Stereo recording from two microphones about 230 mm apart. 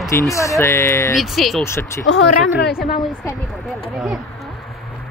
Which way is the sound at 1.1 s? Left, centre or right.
Centre.